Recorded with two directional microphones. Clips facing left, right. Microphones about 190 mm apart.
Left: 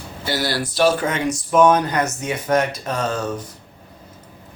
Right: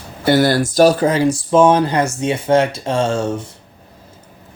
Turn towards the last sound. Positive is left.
turn(degrees=-25)  # may be behind; listen again after turning